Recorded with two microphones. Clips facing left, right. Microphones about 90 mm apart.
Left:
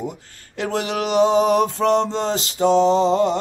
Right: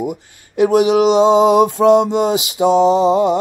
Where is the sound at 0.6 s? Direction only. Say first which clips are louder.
Right 11 dB; 15° right (ahead or behind).